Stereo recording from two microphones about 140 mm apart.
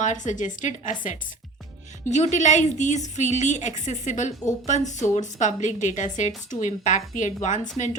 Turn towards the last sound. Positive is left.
turn(degrees=60)  # may be behind; listen again after turning